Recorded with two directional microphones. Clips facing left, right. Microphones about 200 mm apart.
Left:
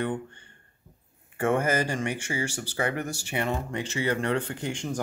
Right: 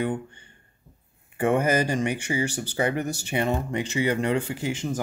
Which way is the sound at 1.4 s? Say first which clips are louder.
Right 3 dB; 15° right (ahead or behind).